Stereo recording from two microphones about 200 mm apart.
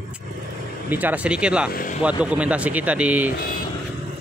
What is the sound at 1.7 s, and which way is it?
Vehicle, 40° left (ahead or behind).